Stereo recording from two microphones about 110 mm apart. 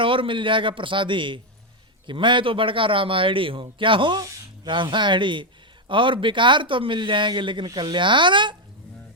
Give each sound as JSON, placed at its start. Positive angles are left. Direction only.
{"t": 0.0, "sound": "speech", "side_deg": -50}